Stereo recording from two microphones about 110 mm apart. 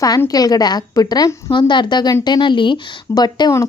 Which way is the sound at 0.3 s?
35° left (ahead or behind).